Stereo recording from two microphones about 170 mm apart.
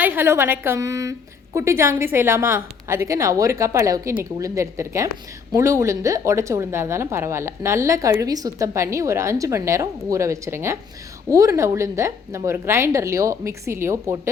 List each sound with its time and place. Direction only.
0.0 s a woman's voice: 10° right (ahead or behind)